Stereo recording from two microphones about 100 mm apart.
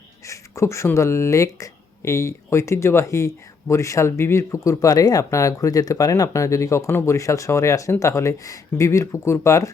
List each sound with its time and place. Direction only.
0.3 s speech: 30° left (ahead or behind)